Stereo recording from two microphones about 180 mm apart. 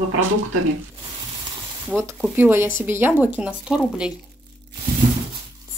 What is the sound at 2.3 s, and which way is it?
Speech, 10° right (ahead or behind).